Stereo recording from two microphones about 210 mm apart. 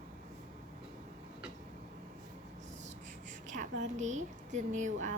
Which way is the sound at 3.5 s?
35° right (ahead or behind).